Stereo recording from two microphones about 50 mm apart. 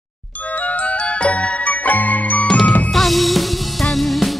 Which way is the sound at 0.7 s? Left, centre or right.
Left.